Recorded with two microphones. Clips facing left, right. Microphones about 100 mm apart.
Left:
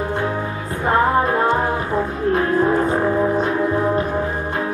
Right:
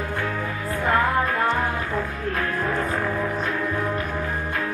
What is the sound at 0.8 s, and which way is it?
Music, 30° left (ahead or behind).